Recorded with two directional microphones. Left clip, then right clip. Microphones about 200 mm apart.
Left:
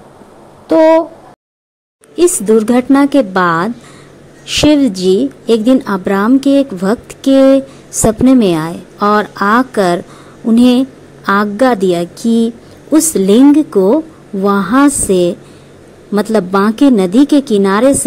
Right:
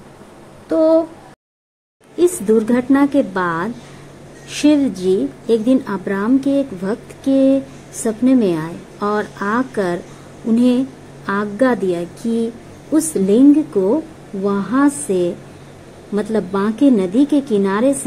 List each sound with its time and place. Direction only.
2.1 s a woman's voice: 30° left (ahead or behind)